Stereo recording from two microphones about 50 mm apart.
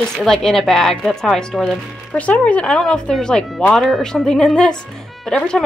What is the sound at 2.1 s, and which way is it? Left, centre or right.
Speech, left.